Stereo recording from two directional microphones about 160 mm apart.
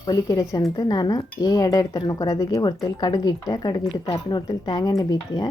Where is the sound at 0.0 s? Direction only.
25° left (ahead or behind).